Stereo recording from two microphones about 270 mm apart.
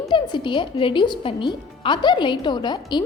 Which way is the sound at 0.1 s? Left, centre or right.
Centre.